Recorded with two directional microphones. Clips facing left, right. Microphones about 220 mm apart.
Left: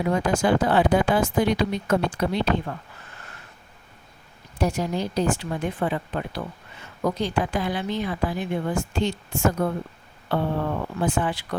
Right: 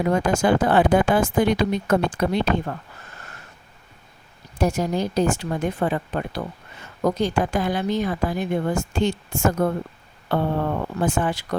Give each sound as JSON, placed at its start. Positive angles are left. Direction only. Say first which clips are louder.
{"t": 0.0, "sound": "a woman's voice", "louder": "right 2 dB", "side_deg": -45}
{"t": 4.5, "sound": "a woman's voice", "louder": "right 3 dB", "side_deg": -45}